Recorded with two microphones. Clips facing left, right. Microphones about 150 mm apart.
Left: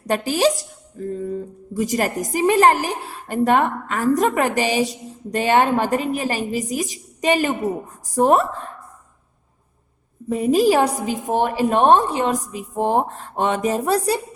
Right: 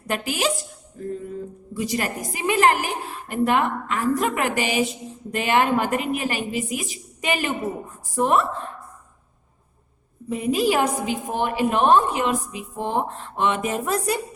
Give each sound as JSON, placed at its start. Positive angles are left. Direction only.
{"t": 0.1, "sound": "a woman's voice", "side_deg": 35}
{"t": 10.2, "sound": "a woman's voice", "side_deg": 40}